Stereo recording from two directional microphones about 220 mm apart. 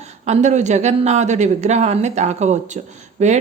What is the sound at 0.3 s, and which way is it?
Speech, 30° right (ahead or behind).